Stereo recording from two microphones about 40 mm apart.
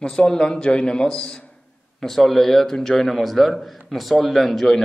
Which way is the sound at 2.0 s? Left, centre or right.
Centre.